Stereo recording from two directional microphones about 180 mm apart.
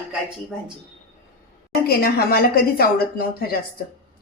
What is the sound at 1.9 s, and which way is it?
A woman's voice, 55° left (ahead or behind).